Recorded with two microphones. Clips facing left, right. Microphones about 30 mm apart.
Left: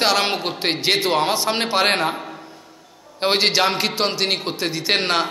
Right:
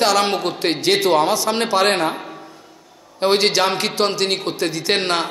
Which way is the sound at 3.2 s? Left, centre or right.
Centre.